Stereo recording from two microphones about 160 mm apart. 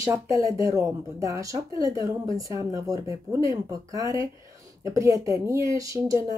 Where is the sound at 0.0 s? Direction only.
20° right (ahead or behind).